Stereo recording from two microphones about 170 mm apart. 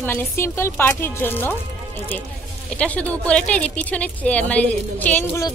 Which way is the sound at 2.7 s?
5° left (ahead or behind).